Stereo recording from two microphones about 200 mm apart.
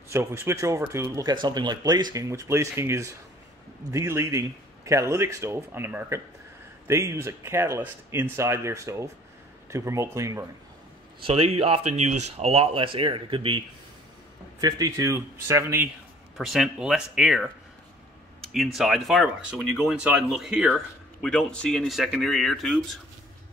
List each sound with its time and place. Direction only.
0.1 s speech: 10° right (ahead or behind)
11.2 s speech: 30° right (ahead or behind)
14.6 s speech: 20° right (ahead or behind)
18.5 s speech: centre (ahead or behind)